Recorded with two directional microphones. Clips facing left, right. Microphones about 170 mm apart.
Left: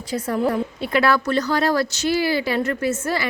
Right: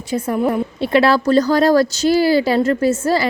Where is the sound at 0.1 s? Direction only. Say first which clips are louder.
Right 3 dB; 20° right (ahead or behind).